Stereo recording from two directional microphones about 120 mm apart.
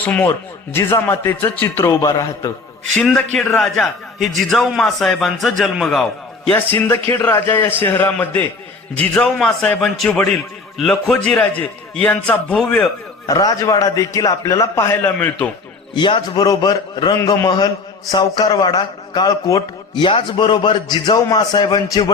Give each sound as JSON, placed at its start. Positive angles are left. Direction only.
{"t": 0.0, "sound": "speech", "side_deg": 15}
{"t": 2.9, "sound": "a man's voice", "side_deg": 5}
{"t": 6.5, "sound": "a man's voice", "side_deg": 15}
{"t": 13.2, "sound": "speech", "side_deg": 30}
{"t": 16.0, "sound": "a man's voice", "side_deg": 45}
{"t": 20.0, "sound": "a man's voice", "side_deg": 40}